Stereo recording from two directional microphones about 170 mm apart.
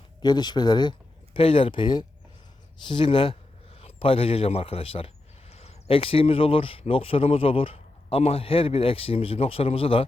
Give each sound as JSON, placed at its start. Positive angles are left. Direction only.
{"t": 0.2, "sound": "speech", "side_deg": 25}